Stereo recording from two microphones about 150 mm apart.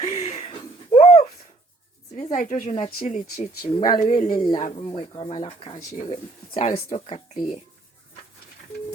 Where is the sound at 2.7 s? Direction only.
40° left (ahead or behind).